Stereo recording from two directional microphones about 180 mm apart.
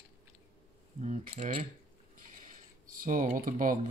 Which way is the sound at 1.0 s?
40° right (ahead or behind).